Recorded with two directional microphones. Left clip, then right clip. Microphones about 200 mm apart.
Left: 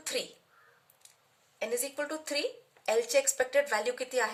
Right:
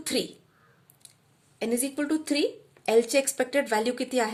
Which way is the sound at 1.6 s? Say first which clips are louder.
Right 4 dB; 35° right (ahead or behind).